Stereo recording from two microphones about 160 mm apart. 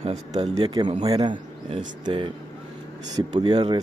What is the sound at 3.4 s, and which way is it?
Speech, 25° right (ahead or behind).